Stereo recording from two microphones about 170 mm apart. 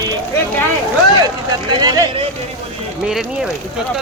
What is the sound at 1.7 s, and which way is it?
Speech, 25° right (ahead or behind).